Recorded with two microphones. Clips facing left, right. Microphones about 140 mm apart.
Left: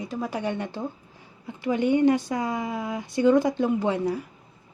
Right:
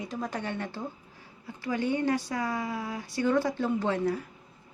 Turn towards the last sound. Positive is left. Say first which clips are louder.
# left 3 dB
turn(degrees=15)  # may be behind; listen again after turning